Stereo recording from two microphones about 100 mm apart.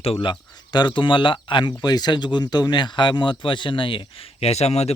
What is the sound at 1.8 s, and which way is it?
Speech, 45° left (ahead or behind).